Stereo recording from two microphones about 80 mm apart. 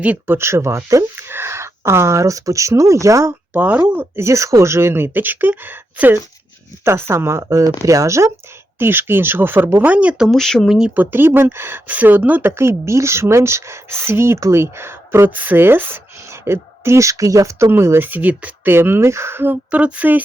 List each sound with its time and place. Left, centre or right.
0.0 s speech: centre
0.3 s speech: right
3.5 s speech: right
8.8 s speech: right
9.8 s speech: centre
10.3 s speech: centre
10.9 s speech: right
11.9 s speech: right
19.7 s speech: centre